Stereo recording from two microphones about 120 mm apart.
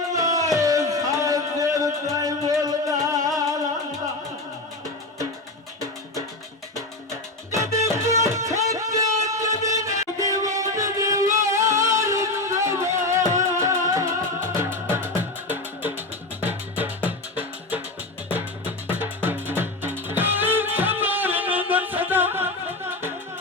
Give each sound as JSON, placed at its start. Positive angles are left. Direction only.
{"t": 0.1, "sound": "a sound", "side_deg": -30}
{"t": 7.5, "sound": "music", "side_deg": -25}
{"t": 18.9, "sound": "music", "side_deg": -15}